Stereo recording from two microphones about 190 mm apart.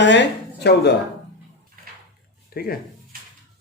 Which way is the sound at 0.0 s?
70° left (ahead or behind).